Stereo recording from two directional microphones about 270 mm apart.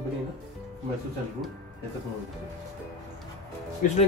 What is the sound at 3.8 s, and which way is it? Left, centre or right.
Speech, left.